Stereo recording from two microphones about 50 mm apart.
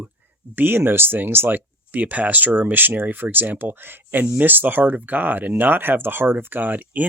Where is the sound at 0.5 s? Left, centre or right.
Right.